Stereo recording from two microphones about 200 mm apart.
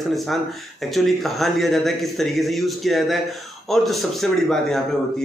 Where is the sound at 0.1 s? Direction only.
Centre (ahead or behind).